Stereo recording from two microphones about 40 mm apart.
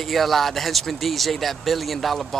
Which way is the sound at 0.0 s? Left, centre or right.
Centre.